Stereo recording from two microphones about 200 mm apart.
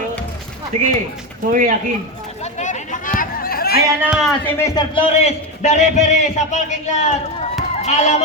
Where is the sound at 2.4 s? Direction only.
35° left (ahead or behind).